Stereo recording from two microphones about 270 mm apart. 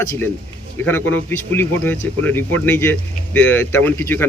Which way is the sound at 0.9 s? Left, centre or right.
Centre.